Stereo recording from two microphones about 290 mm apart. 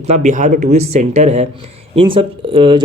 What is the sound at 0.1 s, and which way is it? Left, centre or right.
Speech, right.